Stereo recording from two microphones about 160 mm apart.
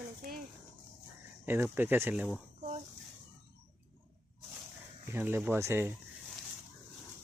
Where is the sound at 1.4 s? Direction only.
15° right (ahead or behind).